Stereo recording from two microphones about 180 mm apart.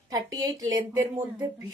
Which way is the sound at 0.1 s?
20° right (ahead or behind).